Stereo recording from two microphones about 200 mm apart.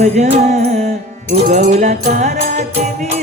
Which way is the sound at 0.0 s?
35° right (ahead or behind).